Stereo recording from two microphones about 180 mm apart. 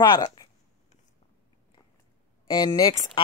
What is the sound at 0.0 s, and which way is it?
Speech, 25° left (ahead or behind).